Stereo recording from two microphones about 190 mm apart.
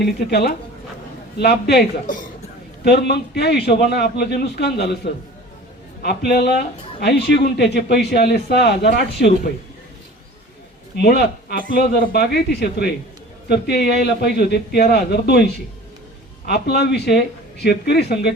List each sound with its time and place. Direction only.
0.0 s speech: 60° left (ahead or behind)
6.0 s speech: 55° left (ahead or behind)
10.9 s speech: 60° left (ahead or behind)
16.5 s speech: 60° left (ahead or behind)